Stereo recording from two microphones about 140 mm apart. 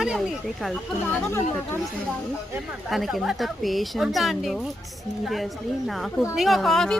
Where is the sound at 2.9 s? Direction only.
Centre (ahead or behind).